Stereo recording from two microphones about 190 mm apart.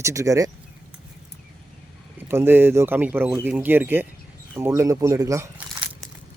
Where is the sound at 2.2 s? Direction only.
10° right (ahead or behind).